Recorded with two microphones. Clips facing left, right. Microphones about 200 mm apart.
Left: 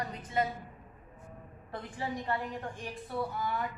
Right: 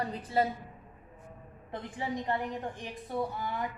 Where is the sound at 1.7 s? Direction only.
20° right (ahead or behind).